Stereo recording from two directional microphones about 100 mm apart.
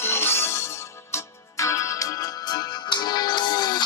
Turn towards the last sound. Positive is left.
turn(degrees=45)  # may be behind; listen again after turning